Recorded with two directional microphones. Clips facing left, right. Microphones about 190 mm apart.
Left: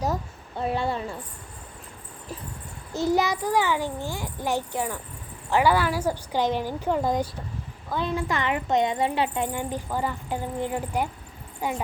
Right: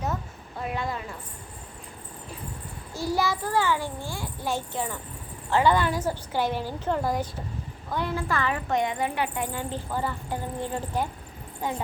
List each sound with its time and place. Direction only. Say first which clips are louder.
0.6 s a woman's voice: left 5 dB; 30° left (ahead or behind)
2.9 s speech: left 4 dB; 20° left (ahead or behind)